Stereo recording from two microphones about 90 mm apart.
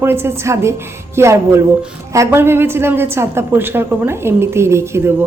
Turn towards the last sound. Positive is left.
turn(degrees=-30)  # may be behind; listen again after turning